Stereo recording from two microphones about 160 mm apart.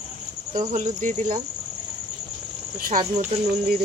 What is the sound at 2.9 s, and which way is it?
Speech, 60° right (ahead or behind).